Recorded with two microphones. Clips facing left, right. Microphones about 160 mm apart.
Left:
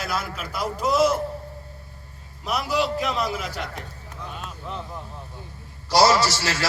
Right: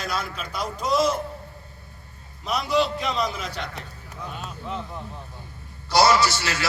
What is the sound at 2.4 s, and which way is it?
A man's voice, 5° left (ahead or behind).